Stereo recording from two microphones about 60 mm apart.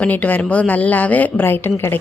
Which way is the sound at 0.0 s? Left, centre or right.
Left.